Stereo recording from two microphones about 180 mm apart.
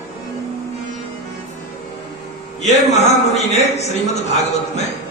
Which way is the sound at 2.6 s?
40° left (ahead or behind).